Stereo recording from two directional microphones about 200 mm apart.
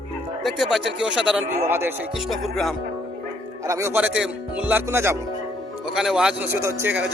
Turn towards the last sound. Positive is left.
turn(degrees=-5)  # may be behind; listen again after turning